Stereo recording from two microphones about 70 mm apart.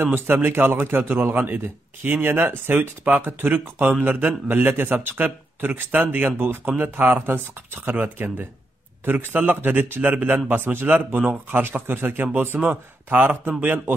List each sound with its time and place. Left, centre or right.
0.0 s a man's voice: right